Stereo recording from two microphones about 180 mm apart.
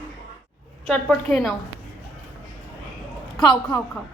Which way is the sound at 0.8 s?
Centre (ahead or behind).